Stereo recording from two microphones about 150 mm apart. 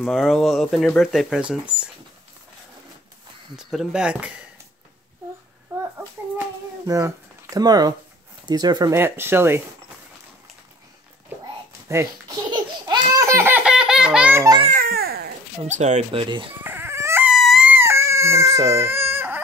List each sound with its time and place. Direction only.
0.0 s speech: centre (ahead or behind)
3.5 s speech: 5° right (ahead or behind)
5.7 s a sound: 15° right (ahead or behind)
6.9 s speech: 20° right (ahead or behind)
8.9 s speech: 15° right (ahead or behind)
11.9 s speech: 20° right (ahead or behind)
12.4 s laughter: 25° right (ahead or behind)
13.7 s baby laughter: 5° right (ahead or behind)
14.7 s babbling: 80° right
15.6 s speech: 50° right (ahead or behind)
16.6 s dog: 15° right (ahead or behind)
17.3 s a sound: centre (ahead or behind)
17.6 s chicken: 15° right (ahead or behind)
18.7 s baby cry: 15° right (ahead or behind)